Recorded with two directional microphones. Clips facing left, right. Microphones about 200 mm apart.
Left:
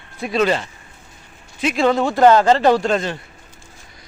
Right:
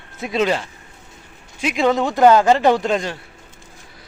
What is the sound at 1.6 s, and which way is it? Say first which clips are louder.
Speech: left 1 dB; 15° right (ahead or behind).